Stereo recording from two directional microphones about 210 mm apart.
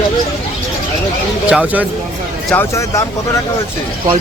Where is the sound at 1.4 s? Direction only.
5° right (ahead or behind).